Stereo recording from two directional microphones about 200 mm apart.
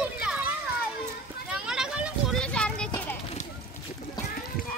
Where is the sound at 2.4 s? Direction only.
5° left (ahead or behind).